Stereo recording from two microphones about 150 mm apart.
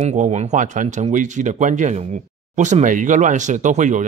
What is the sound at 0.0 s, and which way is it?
Speech, 50° right (ahead or behind).